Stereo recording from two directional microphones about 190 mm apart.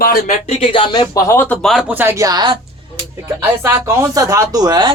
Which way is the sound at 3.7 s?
15° right (ahead or behind).